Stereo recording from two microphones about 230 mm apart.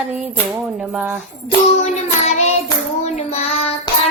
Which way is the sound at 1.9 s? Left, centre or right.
Left.